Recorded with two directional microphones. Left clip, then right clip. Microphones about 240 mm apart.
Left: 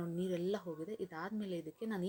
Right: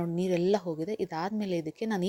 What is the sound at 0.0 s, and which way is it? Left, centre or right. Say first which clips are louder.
Speech: right 10 dB; right.